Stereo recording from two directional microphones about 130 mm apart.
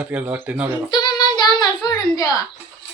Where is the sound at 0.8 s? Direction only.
35° left (ahead or behind).